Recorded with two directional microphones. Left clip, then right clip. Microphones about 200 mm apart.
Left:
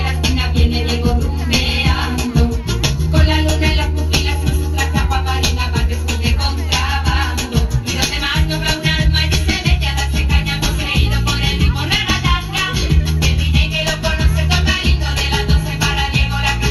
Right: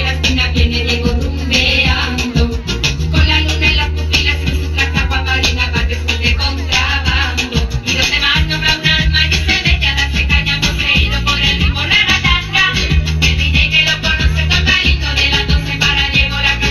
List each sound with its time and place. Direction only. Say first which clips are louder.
0.0 s music: right 5 dB; 65° left (ahead or behind)